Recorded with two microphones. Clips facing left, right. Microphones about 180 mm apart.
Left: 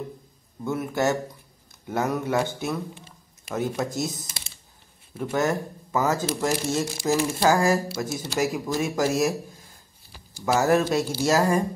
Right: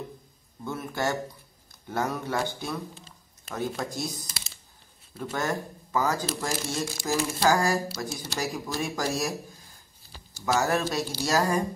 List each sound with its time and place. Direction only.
0.7 s speech: 20° left (ahead or behind)
10.6 s speech: 20° left (ahead or behind)